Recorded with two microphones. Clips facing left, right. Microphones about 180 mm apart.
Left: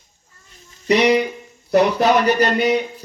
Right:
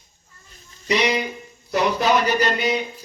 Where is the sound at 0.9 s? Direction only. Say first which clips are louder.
Left 6 dB; 60° left (ahead or behind).